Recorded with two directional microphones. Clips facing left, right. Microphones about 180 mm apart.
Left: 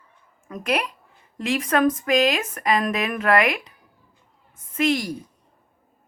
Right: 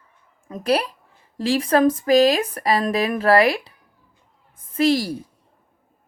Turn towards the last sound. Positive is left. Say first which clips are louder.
# right 3 dB
turn(degrees=-30)  # may be behind; listen again after turning